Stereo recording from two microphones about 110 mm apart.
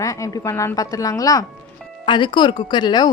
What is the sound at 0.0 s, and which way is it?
A woman's voice, 30° left (ahead or behind).